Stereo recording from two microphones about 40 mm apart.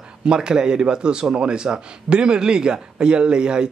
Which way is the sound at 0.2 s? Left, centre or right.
Right.